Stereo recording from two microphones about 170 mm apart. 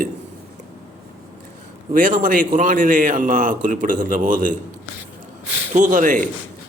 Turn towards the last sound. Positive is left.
turn(degrees=-50)  # may be behind; listen again after turning